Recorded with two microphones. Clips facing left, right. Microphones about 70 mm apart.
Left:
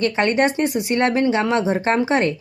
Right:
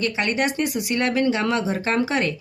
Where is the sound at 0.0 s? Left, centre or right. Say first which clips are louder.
Left 5 dB; left.